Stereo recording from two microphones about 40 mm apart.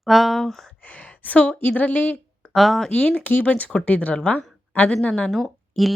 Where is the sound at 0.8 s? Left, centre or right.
Left.